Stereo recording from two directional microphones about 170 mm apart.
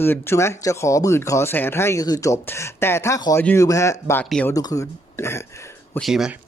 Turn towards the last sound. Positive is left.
turn(degrees=0)  # may be behind; listen again after turning